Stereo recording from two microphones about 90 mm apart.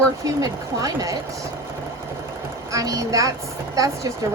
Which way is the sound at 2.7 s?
40° right (ahead or behind).